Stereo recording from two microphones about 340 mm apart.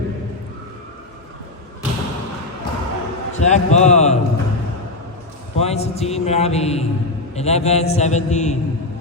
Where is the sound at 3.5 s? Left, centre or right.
Centre.